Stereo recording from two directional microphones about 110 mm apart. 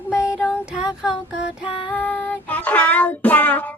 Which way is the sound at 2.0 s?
10° left (ahead or behind).